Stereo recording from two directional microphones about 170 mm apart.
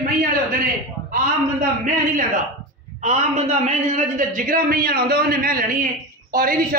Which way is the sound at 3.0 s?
40° right (ahead or behind).